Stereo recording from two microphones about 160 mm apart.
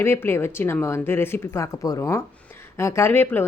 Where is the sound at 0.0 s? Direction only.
15° left (ahead or behind).